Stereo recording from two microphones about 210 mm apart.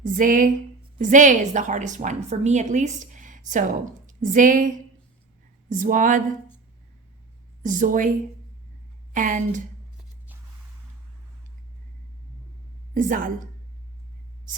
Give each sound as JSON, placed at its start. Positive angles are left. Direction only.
{"t": 0.0, "sound": "a woman's voice", "side_deg": -40}
{"t": 7.6, "sound": "a woman's voice", "side_deg": -40}
{"t": 9.1, "sound": "a woman's voice", "side_deg": -40}
{"t": 12.9, "sound": "a woman's voice", "side_deg": -40}